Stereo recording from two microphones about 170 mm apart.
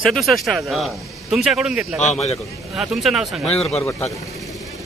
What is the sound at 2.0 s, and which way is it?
Speech, 40° left (ahead or behind).